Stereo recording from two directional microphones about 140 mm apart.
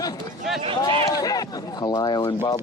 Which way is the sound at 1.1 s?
25° left (ahead or behind).